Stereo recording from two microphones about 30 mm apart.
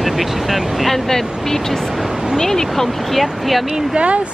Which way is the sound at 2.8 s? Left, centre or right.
Centre.